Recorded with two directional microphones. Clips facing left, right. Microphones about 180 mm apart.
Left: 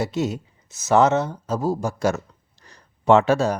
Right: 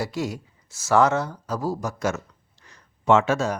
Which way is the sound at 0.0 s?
20° left (ahead or behind).